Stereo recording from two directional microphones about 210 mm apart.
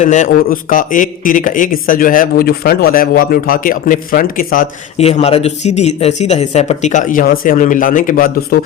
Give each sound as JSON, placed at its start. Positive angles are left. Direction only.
{"t": 0.0, "sound": "a man's voice", "side_deg": 35}